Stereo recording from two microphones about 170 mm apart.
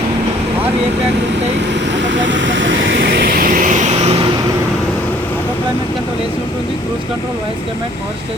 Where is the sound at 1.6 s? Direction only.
90° right; by 4.2 s 40° right (ahead or behind).